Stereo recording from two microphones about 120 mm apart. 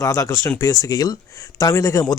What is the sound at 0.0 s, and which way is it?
Speech, 25° left (ahead or behind).